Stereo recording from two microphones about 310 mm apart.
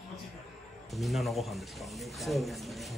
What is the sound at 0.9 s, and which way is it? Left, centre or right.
Speech, centre.